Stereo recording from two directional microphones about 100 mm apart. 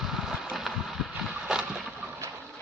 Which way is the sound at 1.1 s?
10° right (ahead or behind).